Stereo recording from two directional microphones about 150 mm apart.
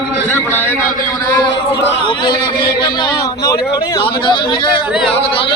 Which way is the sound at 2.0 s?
30° left (ahead or behind).